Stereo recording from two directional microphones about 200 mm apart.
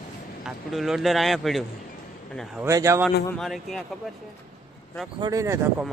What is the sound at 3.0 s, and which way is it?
Speech, centre (ahead or behind).